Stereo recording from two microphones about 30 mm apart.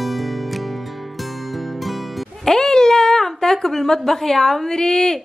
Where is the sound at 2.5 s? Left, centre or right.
Centre.